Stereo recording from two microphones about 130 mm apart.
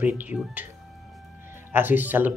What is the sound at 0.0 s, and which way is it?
Speech, 15° right (ahead or behind).